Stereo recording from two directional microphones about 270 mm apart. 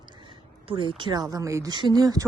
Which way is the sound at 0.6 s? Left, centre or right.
Centre.